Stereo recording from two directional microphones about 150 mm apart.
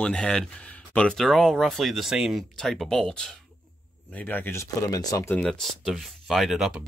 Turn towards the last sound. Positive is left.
turn(degrees=-5)  # may be behind; listen again after turning